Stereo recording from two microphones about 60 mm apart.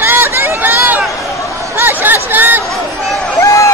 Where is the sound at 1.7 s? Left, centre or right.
Right.